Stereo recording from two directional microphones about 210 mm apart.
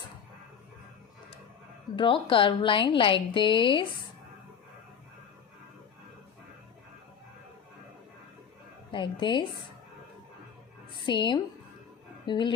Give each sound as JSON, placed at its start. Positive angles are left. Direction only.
{"t": 2.0, "sound": "a woman's voice", "side_deg": 25}
{"t": 8.9, "sound": "a woman's voice", "side_deg": 25}
{"t": 11.0, "sound": "a woman's voice", "side_deg": 20}